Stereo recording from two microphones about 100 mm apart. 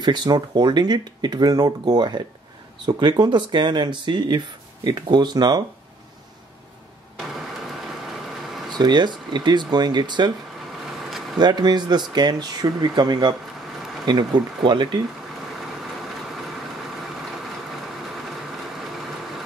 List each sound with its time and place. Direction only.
0.0 s speech: 45° right (ahead or behind)
7.2 s vehicle: centre (ahead or behind)
8.7 s speech: 45° right (ahead or behind)
11.1 s a sound: centre (ahead or behind)
11.3 s speech: 45° right (ahead or behind)